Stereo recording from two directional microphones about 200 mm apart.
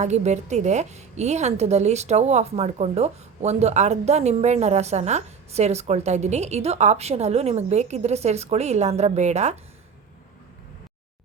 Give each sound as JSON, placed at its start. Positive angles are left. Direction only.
{"t": 0.0, "sound": "a woman's voice", "side_deg": -35}